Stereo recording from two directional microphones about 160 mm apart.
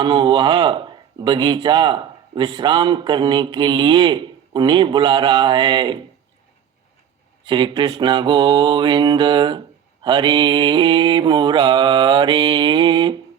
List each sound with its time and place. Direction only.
0.0 s speech: 30° right (ahead or behind)
7.4 s speech: 30° right (ahead or behind)